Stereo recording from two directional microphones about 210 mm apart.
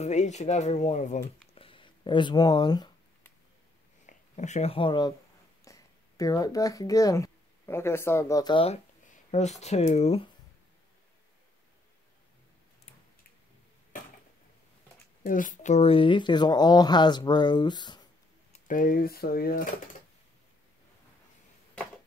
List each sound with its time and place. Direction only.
0.0 s speech: 35° left (ahead or behind)
1.5 s a sound: 25° left (ahead or behind)
4.0 s speech: 35° left (ahead or behind)
9.0 s speech: 35° left (ahead or behind)
15.2 s speech: 40° left (ahead or behind); by 18.0 s 20° left (ahead or behind)
18.5 s speech: 40° left (ahead or behind)